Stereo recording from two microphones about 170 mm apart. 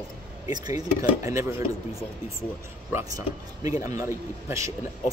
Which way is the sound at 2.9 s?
15° right (ahead or behind).